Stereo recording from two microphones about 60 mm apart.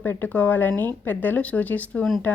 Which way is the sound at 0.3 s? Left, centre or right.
Left.